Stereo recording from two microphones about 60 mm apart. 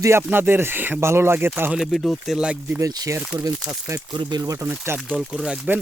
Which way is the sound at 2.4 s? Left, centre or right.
Centre.